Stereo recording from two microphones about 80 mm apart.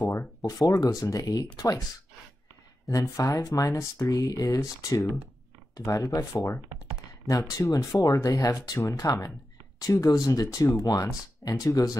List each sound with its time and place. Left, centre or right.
0.4 s speech: left
2.9 s speech: left